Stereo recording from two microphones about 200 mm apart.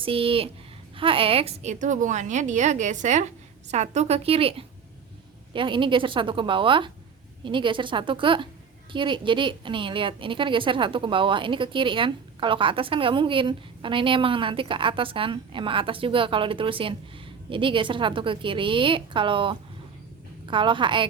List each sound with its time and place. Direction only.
0.0 s a woman's voice: 25° right (ahead or behind)